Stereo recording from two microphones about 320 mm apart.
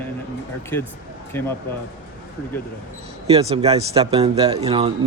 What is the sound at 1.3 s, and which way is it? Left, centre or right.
Speech, centre.